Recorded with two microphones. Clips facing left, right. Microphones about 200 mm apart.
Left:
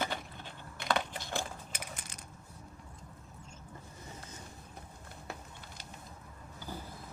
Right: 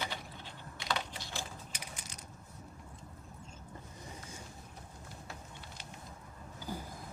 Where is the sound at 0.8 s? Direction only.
50° left (ahead or behind).